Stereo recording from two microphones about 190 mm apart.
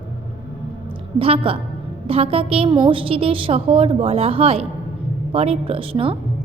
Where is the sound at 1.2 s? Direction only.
30° right (ahead or behind).